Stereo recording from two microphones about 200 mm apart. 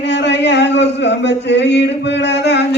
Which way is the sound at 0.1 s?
60° left (ahead or behind).